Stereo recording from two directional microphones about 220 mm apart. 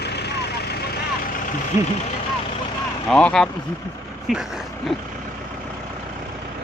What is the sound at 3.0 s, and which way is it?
Speech, 5° left (ahead or behind).